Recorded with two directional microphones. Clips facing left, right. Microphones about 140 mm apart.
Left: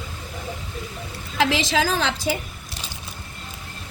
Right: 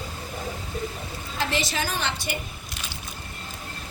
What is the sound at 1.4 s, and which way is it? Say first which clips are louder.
Speech: left 7 dB; 90° left.